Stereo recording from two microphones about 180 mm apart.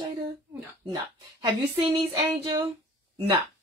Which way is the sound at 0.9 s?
20° right (ahead or behind).